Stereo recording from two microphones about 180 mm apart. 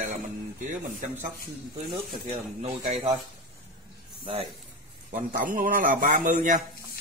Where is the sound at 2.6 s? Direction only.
35° right (ahead or behind).